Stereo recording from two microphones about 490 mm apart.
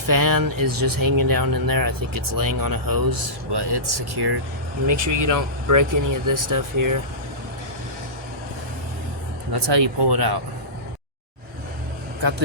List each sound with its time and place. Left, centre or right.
0.1 s speech: right
4.9 s speech: right
9.5 s speech: right